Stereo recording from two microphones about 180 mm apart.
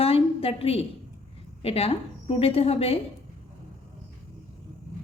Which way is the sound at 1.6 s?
35° left (ahead or behind).